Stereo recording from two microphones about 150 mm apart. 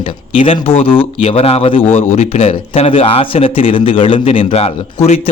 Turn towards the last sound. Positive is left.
turn(degrees=40)  # may be behind; listen again after turning